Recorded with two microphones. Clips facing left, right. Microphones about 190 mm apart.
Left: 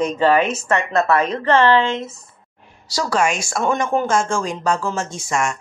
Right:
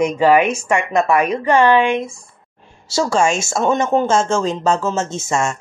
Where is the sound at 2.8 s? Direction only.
25° right (ahead or behind).